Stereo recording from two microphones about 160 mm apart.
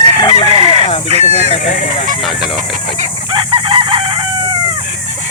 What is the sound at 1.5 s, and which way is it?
Honk, 50° left (ahead or behind).